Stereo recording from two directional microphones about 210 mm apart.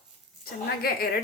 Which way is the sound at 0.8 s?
45° left (ahead or behind).